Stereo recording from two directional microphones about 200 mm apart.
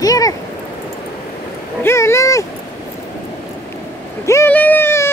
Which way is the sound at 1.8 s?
15° left (ahead or behind).